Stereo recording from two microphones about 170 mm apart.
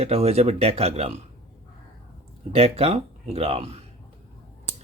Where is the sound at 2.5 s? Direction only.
35° right (ahead or behind).